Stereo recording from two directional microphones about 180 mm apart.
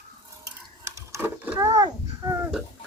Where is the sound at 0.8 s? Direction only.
15° right (ahead or behind).